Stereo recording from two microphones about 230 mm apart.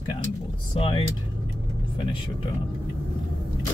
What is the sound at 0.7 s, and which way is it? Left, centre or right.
Speech, left.